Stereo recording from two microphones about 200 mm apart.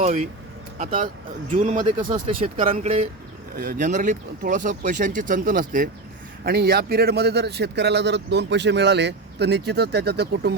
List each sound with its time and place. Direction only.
0.0 s speech: 30° right (ahead or behind)
0.8 s speech: 40° right (ahead or behind)
1.8 s speech: 25° right (ahead or behind)
3.5 s speech: 45° right (ahead or behind)